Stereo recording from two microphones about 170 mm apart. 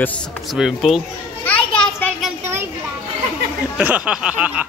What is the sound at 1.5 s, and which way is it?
Children playing, 5° left (ahead or behind).